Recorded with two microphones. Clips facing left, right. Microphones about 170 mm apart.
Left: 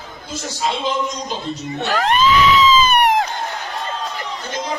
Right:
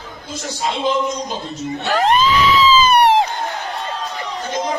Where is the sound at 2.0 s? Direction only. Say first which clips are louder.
Even; 35° right (ahead or behind).